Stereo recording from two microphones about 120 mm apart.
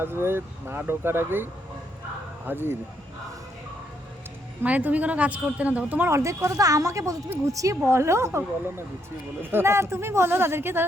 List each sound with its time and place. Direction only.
0.0 s speech: 20° right (ahead or behind)
2.5 s speech: 20° right (ahead or behind)
4.6 s speech: 15° right (ahead or behind)